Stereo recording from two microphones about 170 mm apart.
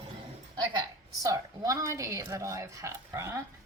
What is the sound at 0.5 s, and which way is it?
Speech, 20° right (ahead or behind).